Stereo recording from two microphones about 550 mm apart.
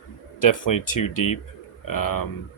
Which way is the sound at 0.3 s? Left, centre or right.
Left.